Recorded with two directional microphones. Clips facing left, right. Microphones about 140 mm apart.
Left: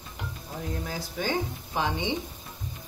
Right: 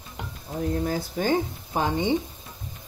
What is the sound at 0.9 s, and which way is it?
Speech, 45° right (ahead or behind).